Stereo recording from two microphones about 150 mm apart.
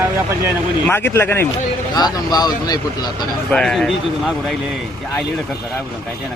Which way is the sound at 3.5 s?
5° left (ahead or behind).